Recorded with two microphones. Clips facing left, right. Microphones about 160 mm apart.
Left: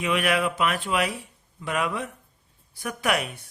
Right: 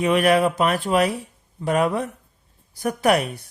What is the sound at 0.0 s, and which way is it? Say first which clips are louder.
Speech: right 7 dB; 40° right (ahead or behind).